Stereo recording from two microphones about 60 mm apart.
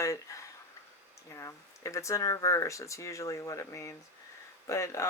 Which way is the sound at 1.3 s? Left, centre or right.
Left.